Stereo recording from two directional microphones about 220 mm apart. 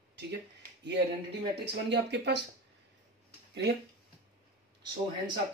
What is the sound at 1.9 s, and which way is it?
Speech, 50° right (ahead or behind).